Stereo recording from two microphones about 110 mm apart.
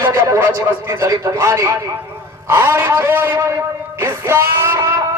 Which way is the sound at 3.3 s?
25° right (ahead or behind).